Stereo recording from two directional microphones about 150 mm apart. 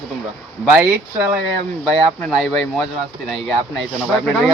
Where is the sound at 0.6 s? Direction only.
10° right (ahead or behind).